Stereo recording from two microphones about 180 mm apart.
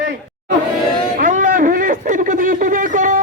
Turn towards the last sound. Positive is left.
turn(degrees=-45)  # may be behind; listen again after turning